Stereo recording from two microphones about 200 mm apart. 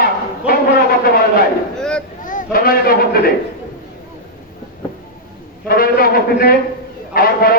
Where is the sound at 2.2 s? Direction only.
45° left (ahead or behind).